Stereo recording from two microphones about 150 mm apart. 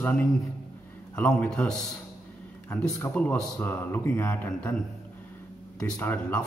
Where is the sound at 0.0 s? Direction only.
10° left (ahead or behind).